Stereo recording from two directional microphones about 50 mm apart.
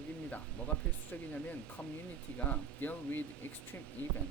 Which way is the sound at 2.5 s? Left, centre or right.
Left.